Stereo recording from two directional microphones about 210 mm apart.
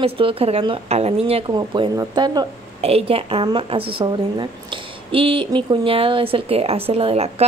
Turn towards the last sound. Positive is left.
turn(degrees=-30)  # may be behind; listen again after turning